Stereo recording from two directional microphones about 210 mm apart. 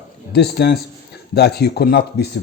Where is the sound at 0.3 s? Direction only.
50° left (ahead or behind).